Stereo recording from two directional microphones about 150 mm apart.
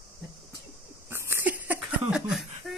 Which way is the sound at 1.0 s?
15° right (ahead or behind).